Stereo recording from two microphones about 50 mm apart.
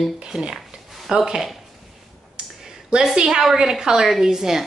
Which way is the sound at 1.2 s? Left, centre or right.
Centre.